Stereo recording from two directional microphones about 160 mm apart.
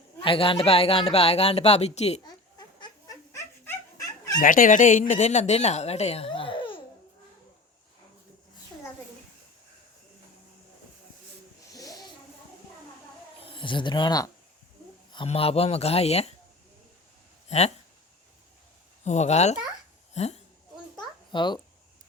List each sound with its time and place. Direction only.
0.2 s speech: 35° left (ahead or behind)
2.2 s chicken: 25° left (ahead or behind)
3.3 s dog: 15° left (ahead or behind)
4.4 s speech: 60° left (ahead or behind); by 6.8 s 30° left (ahead or behind)
11.7 s snake: 25° left (ahead or behind)
13.4 s speech: 30° left (ahead or behind)
17.5 s speech: 45° left (ahead or behind)
19.0 s a woman's voice: 45° left (ahead or behind)
21.3 s speech: 30° left (ahead or behind)